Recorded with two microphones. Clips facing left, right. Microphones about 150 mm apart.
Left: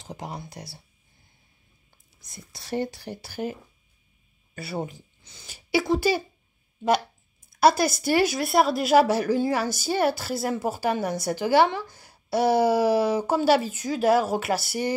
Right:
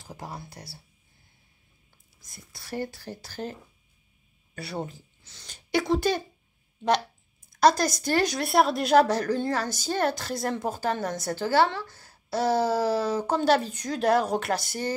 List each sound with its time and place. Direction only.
0.0 s speech: 20° left (ahead or behind)
2.2 s speech: 20° left (ahead or behind)
4.6 s speech: centre (ahead or behind)
7.6 s speech: 10° left (ahead or behind)